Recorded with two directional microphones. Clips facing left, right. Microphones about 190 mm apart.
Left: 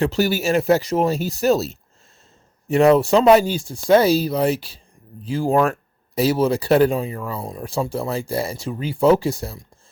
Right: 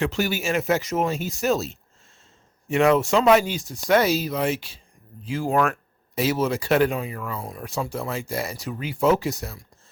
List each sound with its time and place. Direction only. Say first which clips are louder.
0.0 s speech: left 5 dB; 35° left (ahead or behind)